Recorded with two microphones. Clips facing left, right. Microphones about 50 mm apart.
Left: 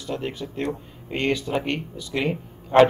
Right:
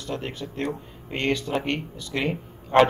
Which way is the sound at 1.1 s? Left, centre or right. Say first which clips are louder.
Left 1 dB; centre.